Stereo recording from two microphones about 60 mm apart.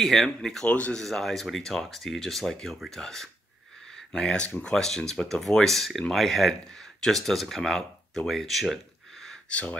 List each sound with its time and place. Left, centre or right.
0.0 s speech: centre
0.7 s speech: left
0.9 s speech: centre
3.9 s a sound: centre
4.6 s speech: centre
9.5 s speech: left